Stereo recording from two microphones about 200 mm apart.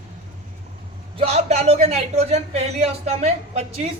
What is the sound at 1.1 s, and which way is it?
A man's voice, 30° right (ahead or behind).